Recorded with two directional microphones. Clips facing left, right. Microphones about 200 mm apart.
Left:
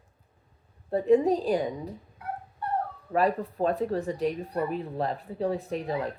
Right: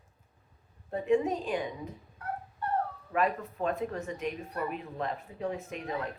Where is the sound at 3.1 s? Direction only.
35° left (ahead or behind).